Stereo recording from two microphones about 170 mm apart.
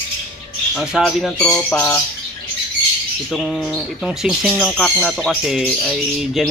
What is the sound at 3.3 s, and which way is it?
Speech, centre (ahead or behind).